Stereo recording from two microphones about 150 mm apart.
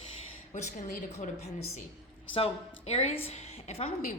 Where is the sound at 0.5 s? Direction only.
65° left (ahead or behind).